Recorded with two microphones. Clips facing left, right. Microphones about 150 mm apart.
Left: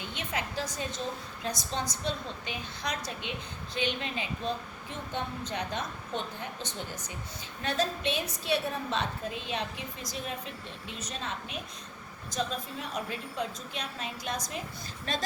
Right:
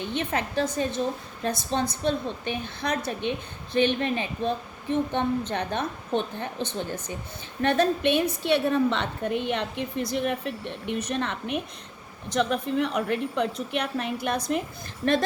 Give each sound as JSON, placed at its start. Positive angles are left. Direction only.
{"t": 0.2, "sound": "a woman's voice", "side_deg": -60}